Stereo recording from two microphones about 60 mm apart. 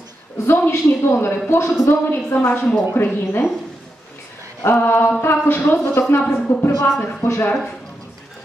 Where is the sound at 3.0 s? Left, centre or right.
Left.